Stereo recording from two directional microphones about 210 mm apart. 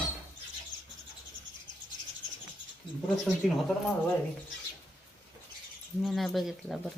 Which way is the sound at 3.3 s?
Centre (ahead or behind).